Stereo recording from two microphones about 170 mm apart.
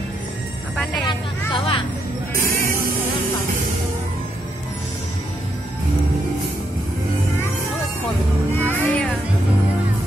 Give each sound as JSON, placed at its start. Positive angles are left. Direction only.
{"t": 1.0, "sound": "speech", "side_deg": 30}
{"t": 8.5, "sound": "music", "side_deg": 10}